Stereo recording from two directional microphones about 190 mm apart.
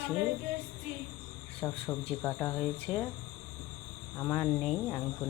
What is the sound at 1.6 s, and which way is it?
Speech, 15° left (ahead or behind).